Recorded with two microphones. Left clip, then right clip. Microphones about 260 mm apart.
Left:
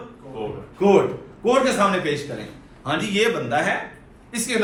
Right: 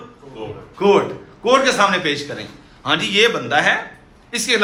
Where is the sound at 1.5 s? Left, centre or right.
Centre.